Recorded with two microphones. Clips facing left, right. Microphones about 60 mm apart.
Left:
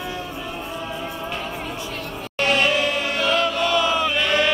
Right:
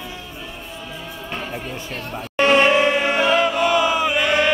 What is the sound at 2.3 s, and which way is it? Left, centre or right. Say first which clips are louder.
Music: right 5 dB; right.